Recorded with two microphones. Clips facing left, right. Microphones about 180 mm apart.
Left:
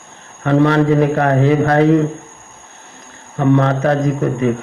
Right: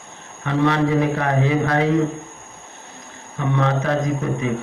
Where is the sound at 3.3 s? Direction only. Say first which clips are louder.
Left 7 dB; 50° left (ahead or behind).